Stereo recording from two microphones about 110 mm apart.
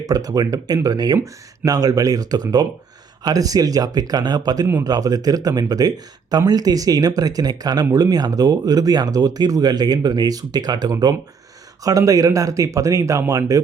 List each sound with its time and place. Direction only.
0.1 s speech: 35° right (ahead or behind)